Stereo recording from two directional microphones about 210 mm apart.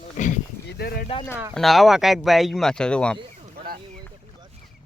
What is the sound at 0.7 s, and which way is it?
Speech, 50° left (ahead or behind).